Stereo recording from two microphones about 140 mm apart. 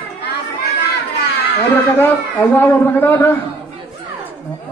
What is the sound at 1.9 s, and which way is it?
A man's voice, 10° left (ahead or behind).